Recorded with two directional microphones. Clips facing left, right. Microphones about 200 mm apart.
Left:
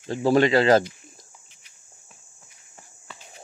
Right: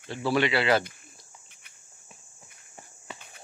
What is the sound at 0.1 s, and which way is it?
Speech, 40° left (ahead or behind).